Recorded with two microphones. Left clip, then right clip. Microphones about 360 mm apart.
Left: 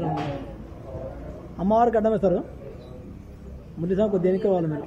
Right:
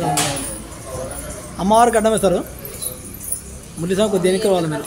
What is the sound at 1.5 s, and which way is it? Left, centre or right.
Speech, left.